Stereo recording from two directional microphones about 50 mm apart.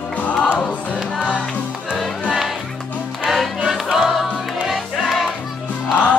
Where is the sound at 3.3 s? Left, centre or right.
Centre.